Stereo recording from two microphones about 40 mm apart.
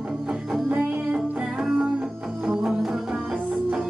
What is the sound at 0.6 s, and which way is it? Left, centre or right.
Music, right.